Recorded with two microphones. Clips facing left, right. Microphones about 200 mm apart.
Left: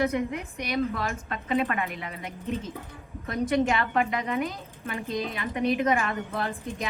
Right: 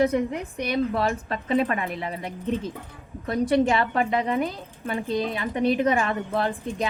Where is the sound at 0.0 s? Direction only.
35° right (ahead or behind).